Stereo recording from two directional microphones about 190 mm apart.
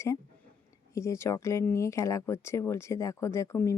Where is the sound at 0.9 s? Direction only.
15° left (ahead or behind).